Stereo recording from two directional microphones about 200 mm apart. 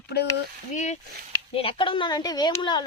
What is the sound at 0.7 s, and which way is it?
Speech, 35° left (ahead or behind).